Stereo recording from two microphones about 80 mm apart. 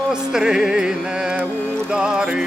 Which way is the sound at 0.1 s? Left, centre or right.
Centre.